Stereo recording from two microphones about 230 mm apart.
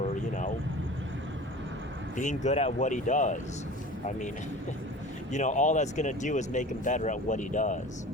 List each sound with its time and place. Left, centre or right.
2.1 s speech: left
5.3 s speech: left